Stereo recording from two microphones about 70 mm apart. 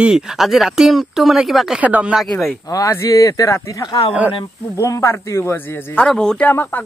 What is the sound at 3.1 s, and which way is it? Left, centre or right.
Speech, left.